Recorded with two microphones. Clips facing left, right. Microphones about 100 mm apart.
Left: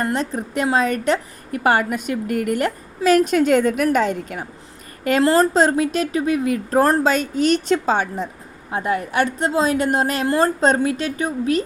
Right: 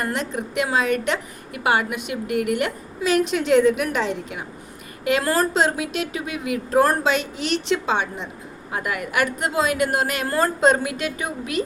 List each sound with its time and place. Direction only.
0.0 s a woman's voice: 35° left (ahead or behind)
5.2 s a woman's voice: 25° left (ahead or behind)
5.5 s a woman's voice: 40° left (ahead or behind)
8.7 s a woman's voice: 30° left (ahead or behind)